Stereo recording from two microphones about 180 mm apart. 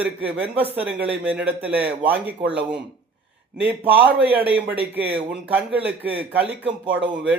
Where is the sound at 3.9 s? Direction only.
10° right (ahead or behind).